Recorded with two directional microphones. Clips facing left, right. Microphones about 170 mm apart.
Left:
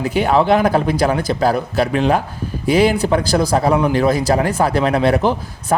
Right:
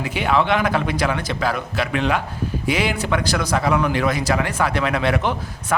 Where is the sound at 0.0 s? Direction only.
40° left (ahead or behind).